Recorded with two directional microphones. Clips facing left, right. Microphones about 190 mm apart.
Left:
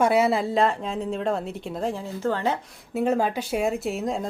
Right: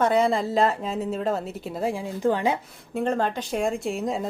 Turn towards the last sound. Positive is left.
turn(degrees=0)  # may be behind; listen again after turning